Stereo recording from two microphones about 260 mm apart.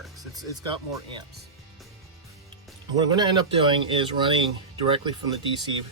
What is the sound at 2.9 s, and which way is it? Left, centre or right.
Speech, centre.